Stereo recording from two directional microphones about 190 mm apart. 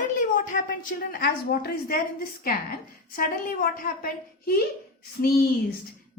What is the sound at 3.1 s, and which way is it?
A woman's voice, 50° left (ahead or behind).